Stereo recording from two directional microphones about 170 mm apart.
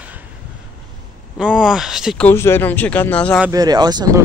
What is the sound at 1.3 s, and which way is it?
Speech, 5° right (ahead or behind).